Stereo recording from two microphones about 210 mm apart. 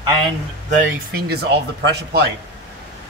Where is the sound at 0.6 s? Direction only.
40° right (ahead or behind).